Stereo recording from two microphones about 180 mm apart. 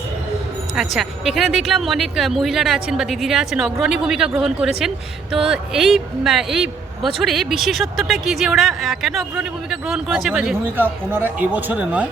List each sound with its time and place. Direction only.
0.9 s speech: centre (ahead or behind)